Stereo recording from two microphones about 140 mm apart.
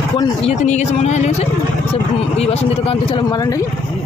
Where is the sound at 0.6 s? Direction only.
60° left (ahead or behind).